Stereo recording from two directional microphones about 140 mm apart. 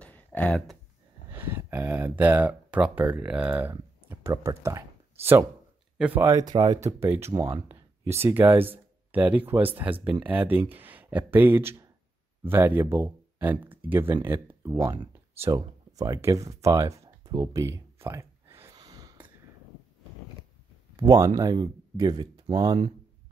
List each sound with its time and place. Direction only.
0.0 s a sound: 10° left (ahead or behind)
1.3 s speech: 15° right (ahead or behind)
6.3 s speech: 30° right (ahead or behind)
7.0 s speech: 15° right (ahead or behind)
17.4 s a sound: 25° right (ahead or behind)
18.7 s gasp: 30° right (ahead or behind)
20.9 s speech: 30° right (ahead or behind)